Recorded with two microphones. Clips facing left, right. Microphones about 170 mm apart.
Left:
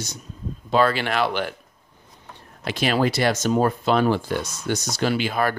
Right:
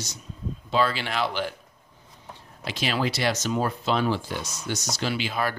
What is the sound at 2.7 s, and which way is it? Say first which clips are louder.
Speech: left 6 dB; 55° left (ahead or behind).